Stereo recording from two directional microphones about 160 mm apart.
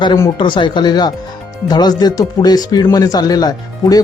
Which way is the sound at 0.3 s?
30° left (ahead or behind).